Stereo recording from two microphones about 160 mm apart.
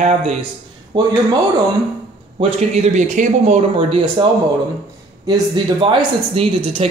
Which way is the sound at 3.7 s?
35° right (ahead or behind).